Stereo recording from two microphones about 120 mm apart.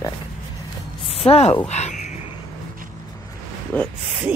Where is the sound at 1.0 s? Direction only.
55° left (ahead or behind).